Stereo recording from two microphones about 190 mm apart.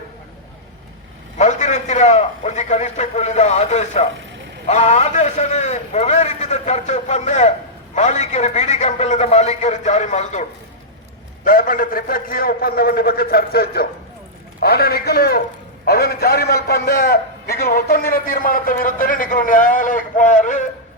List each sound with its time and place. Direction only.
1.4 s a man's voice: 40° left (ahead or behind)
11.4 s a man's voice: 45° left (ahead or behind)